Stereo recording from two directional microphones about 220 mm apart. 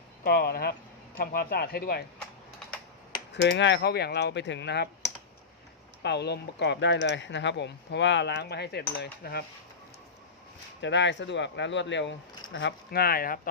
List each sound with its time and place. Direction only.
0.3 s speech: 45° left (ahead or behind)
3.3 s speech: 55° left (ahead or behind)
6.0 s speech: 50° left (ahead or behind)
10.8 s speech: 55° left (ahead or behind)